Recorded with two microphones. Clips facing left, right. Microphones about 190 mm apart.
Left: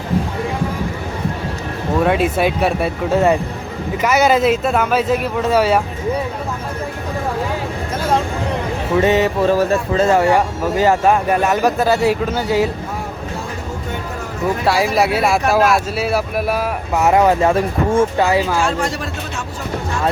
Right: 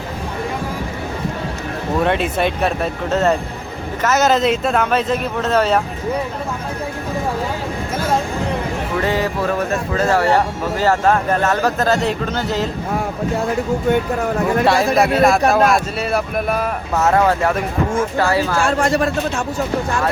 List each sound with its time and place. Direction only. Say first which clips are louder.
2.0 s speech: left 3 dB; 5° left (ahead or behind)
9.0 s speech: left 6 dB; 20° left (ahead or behind)
14.6 s speech: even; 5° left (ahead or behind)
17.1 s speech: left 3 dB; 15° left (ahead or behind)
17.5 s speech: left 3 dB; 30° left (ahead or behind)
18.3 s speech: left 1 dB; 15° left (ahead or behind)
18.6 s a man's voice: right 4 dB; 50° right (ahead or behind)